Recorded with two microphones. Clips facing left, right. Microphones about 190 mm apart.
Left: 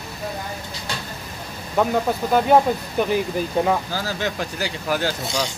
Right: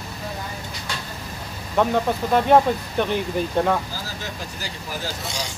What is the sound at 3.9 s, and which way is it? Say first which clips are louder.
Speech: left 7 dB; 75° left (ahead or behind).